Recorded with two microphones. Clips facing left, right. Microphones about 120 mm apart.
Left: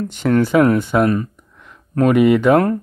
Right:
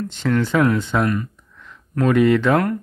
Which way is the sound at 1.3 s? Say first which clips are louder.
Even; 15° left (ahead or behind).